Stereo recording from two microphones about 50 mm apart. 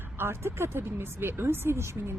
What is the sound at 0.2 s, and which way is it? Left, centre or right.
Speech, right.